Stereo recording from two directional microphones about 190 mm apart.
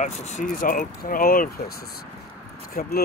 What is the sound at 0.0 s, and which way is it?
Speech, 40° left (ahead or behind).